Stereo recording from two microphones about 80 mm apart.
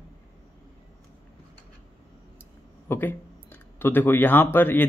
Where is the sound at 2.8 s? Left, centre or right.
Left.